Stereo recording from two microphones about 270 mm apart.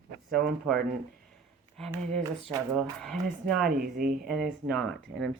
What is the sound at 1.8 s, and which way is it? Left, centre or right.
Speech, centre.